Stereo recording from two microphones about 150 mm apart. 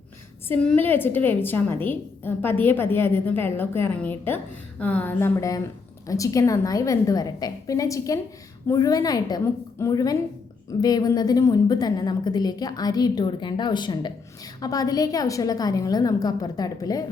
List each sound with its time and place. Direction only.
0.4 s a woman's voice: 10° left (ahead or behind)